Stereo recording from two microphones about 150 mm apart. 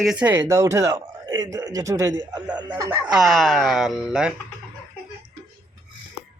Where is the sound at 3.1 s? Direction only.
Centre (ahead or behind).